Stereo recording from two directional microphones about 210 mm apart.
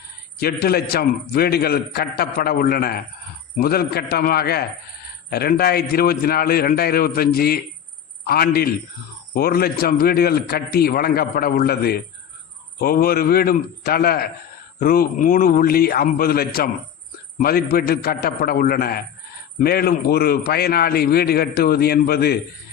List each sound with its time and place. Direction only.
0.3 s a man's voice: 45° left (ahead or behind)